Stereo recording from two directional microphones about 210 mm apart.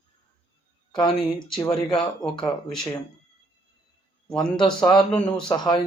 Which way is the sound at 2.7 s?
Centre (ahead or behind).